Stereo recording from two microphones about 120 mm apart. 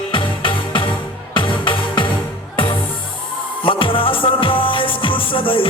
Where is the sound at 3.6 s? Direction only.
45° left (ahead or behind).